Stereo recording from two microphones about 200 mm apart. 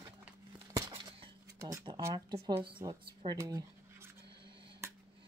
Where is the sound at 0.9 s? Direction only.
25° right (ahead or behind).